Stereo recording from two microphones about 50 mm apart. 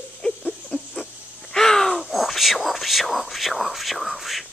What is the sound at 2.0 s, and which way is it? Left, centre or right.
Whispering, centre.